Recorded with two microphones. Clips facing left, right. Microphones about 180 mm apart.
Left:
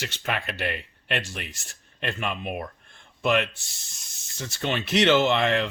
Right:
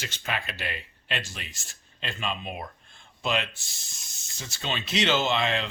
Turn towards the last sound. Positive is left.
turn(degrees=60)  # may be behind; listen again after turning